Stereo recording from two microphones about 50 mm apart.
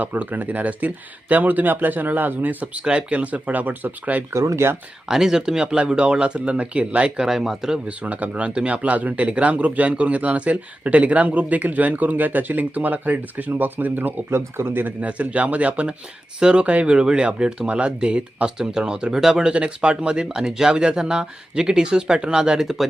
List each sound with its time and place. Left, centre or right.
0.0 s speech: right
2.7 s speech: right
4.3 s speech: right
5.0 s speech: centre
7.3 s speech: centre
7.9 s speech: right
14.3 s speech: right
15.0 s speech: right; by 19.5 s centre
19.5 s speech: right
22.5 s speech: centre